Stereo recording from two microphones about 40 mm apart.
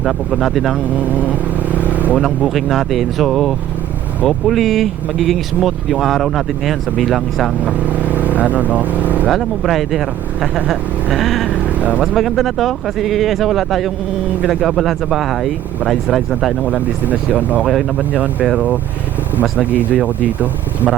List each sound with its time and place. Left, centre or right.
0.0 s speech: centre
1.1 s vehicle: right
2.2 s speech: centre
7.6 s speech: right
9.3 s speech: centre
16.6 s speech: right